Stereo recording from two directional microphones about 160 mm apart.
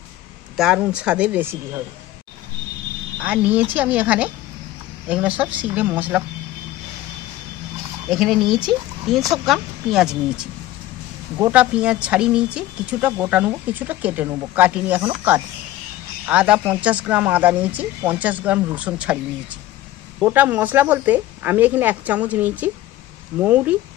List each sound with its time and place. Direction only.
0.6 s speech: 5° right (ahead or behind)
3.2 s speech: 10° right (ahead or behind)
8.1 s speech: centre (ahead or behind)
11.5 s speech: 5° right (ahead or behind)
20.2 s speech: 10° right (ahead or behind)